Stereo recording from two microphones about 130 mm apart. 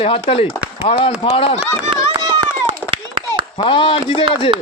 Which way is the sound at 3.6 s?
40° left (ahead or behind).